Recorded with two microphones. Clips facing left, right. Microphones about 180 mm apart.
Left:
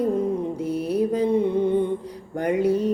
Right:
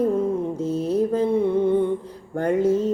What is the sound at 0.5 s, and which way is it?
Music, 10° left (ahead or behind).